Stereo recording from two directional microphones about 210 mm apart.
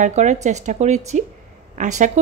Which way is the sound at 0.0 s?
35° right (ahead or behind).